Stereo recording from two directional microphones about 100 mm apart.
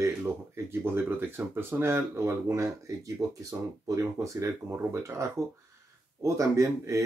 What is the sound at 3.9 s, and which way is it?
Speech, 30° right (ahead or behind).